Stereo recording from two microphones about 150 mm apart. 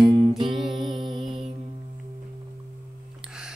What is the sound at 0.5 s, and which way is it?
Music, centre (ahead or behind).